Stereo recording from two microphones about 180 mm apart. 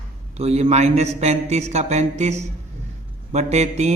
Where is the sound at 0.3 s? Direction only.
35° right (ahead or behind).